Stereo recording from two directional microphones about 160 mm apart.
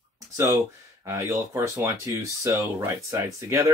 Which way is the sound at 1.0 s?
20° right (ahead or behind).